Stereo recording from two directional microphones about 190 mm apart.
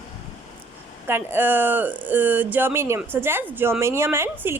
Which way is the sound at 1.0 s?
10° right (ahead or behind).